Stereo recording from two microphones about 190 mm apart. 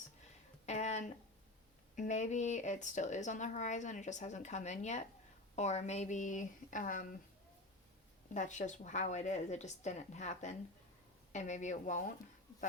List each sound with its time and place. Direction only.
0.6 s a sound: 35° left (ahead or behind)
2.0 s speech: 40° left (ahead or behind)
8.3 s speech: 40° left (ahead or behind)